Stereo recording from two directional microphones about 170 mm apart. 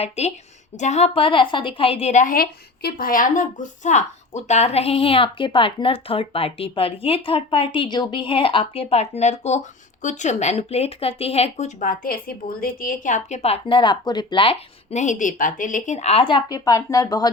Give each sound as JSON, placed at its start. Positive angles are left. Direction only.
{"t": 0.0, "sound": "a woman's voice", "side_deg": 40}